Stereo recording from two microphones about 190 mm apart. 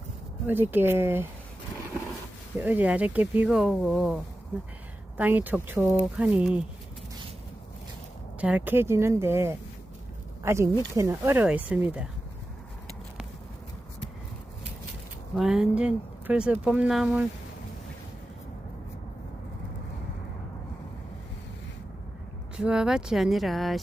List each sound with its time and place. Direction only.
0.4 s speech: 10° right (ahead or behind)
2.6 s speech: 10° right (ahead or behind)
8.4 s speech: 5° right (ahead or behind)
15.4 s speech: 5° right (ahead or behind)
22.5 s speech: 5° right (ahead or behind)